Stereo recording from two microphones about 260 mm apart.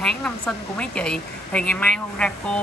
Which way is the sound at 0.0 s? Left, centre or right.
Centre.